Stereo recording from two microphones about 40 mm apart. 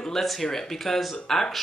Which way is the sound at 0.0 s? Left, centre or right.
Centre.